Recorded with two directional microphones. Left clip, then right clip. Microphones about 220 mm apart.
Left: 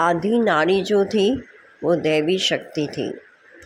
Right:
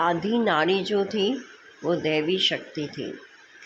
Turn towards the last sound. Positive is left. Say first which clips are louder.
# left 7 dB
turn(degrees=20)  # may be behind; listen again after turning